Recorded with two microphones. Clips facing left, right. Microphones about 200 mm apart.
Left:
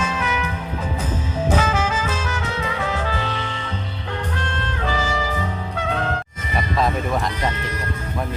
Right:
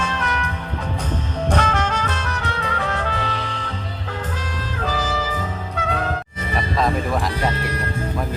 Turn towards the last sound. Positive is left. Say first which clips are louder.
# right 1 dB
turn(degrees=0)  # may be behind; listen again after turning